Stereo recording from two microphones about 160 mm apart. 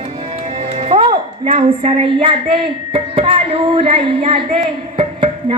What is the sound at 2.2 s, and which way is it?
Music, 35° right (ahead or behind).